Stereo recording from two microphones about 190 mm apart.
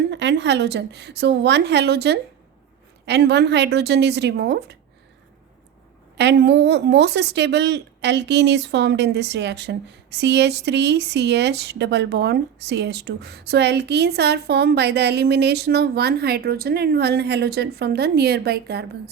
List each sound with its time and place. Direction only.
0.1 s speech: 65° right (ahead or behind)
6.1 s speech: 60° right (ahead or behind)